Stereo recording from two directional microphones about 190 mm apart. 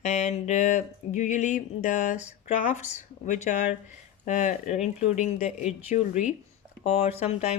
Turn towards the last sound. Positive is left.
turn(degrees=35)  # may be behind; listen again after turning